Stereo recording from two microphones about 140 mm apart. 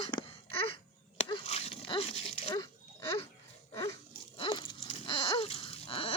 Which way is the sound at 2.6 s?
35° left (ahead or behind).